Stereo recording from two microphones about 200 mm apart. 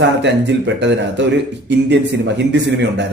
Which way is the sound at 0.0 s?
60° right (ahead or behind).